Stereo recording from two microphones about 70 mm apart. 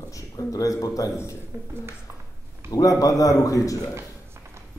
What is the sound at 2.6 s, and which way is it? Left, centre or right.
A man's voice, left.